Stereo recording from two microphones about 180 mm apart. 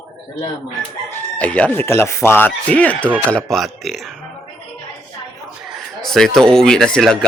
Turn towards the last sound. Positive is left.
turn(degrees=5)  # may be behind; listen again after turning